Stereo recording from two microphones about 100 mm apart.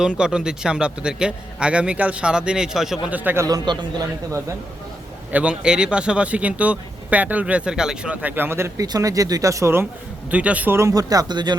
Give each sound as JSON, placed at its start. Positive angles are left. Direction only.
{"t": 0.0, "sound": "speech", "side_deg": -5}
{"t": 3.1, "sound": "speech", "side_deg": -15}
{"t": 3.4, "sound": "a man's voice", "side_deg": -40}
{"t": 5.3, "sound": "speech", "side_deg": -10}
{"t": 10.3, "sound": "speech", "side_deg": -15}
{"t": 10.8, "sound": "speech", "side_deg": -35}